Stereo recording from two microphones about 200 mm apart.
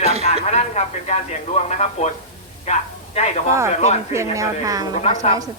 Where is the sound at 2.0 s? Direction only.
30° left (ahead or behind).